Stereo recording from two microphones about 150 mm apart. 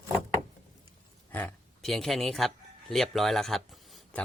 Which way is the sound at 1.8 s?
Centre (ahead or behind).